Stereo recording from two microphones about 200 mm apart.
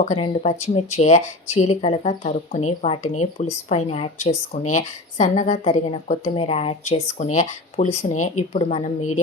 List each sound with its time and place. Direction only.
0.0 s speech: 30° left (ahead or behind)